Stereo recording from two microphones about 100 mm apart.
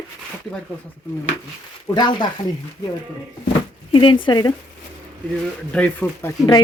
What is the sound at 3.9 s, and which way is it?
Speech, 55° left (ahead or behind).